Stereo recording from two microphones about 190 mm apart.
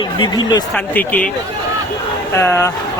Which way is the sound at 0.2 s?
25° left (ahead or behind).